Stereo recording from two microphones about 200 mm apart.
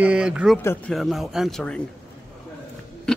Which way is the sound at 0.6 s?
10° left (ahead or behind).